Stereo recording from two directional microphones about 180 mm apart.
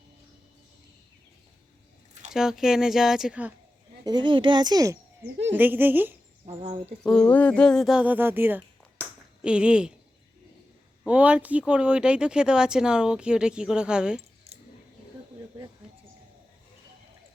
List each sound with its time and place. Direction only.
2.3 s speech: 5° right (ahead or behind)
4.0 s speech: 25° right (ahead or behind)
6.4 s speech: 35° right (ahead or behind)
7.0 s speech: 5° left (ahead or behind)
11.0 s speech: 5° right (ahead or behind)
14.2 s keys jangling: 35° right (ahead or behind)